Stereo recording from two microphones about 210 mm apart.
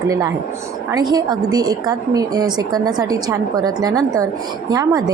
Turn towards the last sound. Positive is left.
turn(degrees=-15)  # may be behind; listen again after turning